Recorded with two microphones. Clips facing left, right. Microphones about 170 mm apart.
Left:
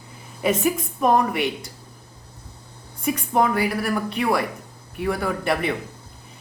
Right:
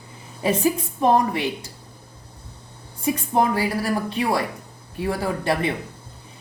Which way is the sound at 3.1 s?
30° right (ahead or behind).